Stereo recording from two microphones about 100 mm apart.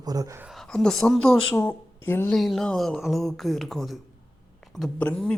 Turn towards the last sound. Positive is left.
turn(degrees=10)  # may be behind; listen again after turning